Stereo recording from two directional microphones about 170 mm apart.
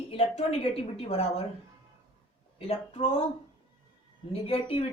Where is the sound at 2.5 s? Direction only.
35° left (ahead or behind).